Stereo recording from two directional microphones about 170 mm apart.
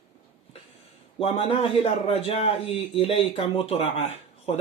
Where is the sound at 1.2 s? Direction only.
35° left (ahead or behind).